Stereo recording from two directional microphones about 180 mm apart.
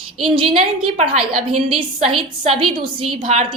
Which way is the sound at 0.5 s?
30° right (ahead or behind).